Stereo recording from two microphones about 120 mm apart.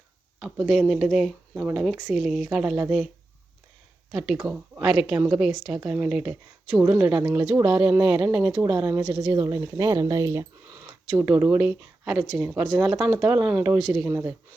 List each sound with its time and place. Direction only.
0.7 s a woman's voice: centre (ahead or behind)
4.1 s a woman's voice: 5° right (ahead or behind)
8.9 s speech: 35° right (ahead or behind)
10.7 s a woman's voice: 10° right (ahead or behind)
13.7 s a woman's voice: centre (ahead or behind)